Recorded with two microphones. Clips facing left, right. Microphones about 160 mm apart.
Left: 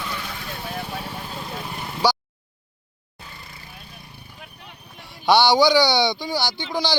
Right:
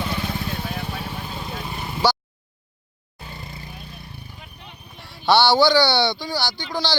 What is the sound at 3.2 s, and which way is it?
Vehicle, 30° right (ahead or behind).